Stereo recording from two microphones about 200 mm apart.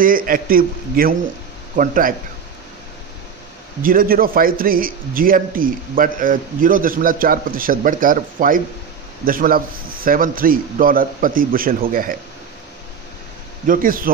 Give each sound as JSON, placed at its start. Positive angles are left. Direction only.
{"t": 0.0, "sound": "a man's voice", "side_deg": -45}
{"t": 3.8, "sound": "a man's voice", "side_deg": -45}
{"t": 13.7, "sound": "a man's voice", "side_deg": -45}